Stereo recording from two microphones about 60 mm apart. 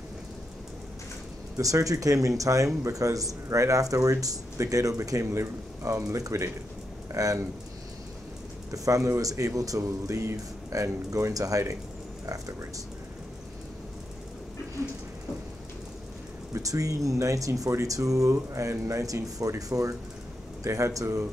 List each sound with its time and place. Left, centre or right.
1.6 s speech: right
3.9 s speech: right
8.7 s speech: right
16.5 s speech: right